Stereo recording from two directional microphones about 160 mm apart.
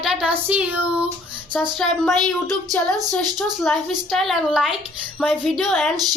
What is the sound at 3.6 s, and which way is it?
Speech, centre (ahead or behind).